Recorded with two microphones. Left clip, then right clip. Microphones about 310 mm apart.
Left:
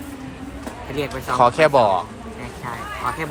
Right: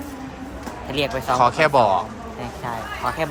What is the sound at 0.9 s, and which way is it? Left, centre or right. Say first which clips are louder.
Speech: even; centre.